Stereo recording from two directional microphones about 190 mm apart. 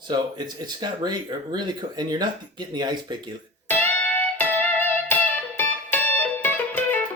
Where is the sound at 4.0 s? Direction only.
10° left (ahead or behind).